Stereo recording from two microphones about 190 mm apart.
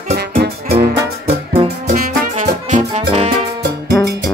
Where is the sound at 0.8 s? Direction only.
35° right (ahead or behind).